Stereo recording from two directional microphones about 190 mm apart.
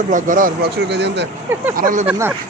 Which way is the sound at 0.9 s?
65° right (ahead or behind).